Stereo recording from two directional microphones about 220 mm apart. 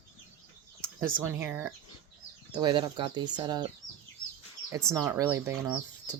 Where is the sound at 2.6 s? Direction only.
20° right (ahead or behind).